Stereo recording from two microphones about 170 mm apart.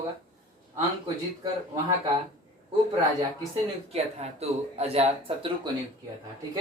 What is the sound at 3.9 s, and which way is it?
Speech, 40° right (ahead or behind).